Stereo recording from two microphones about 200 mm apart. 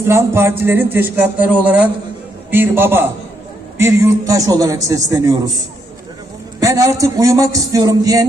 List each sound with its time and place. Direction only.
0.1 s speech: 10° right (ahead or behind)
6.6 s speech: 15° right (ahead or behind)